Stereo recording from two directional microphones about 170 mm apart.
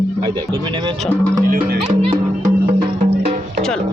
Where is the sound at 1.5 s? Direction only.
65° right (ahead or behind).